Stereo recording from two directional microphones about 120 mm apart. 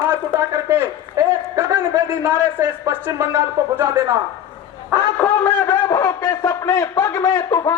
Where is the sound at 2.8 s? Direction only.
25° right (ahead or behind).